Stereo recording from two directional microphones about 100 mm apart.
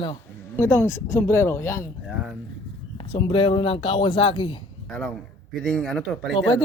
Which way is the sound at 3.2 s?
60° left (ahead or behind).